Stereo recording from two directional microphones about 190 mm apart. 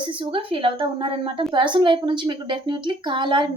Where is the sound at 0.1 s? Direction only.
25° right (ahead or behind).